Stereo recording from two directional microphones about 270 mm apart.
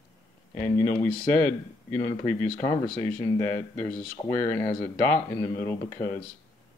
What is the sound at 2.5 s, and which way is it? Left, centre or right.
Speech, left.